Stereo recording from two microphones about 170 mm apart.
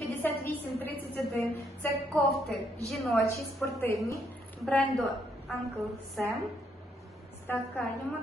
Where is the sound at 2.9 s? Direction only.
Centre (ahead or behind).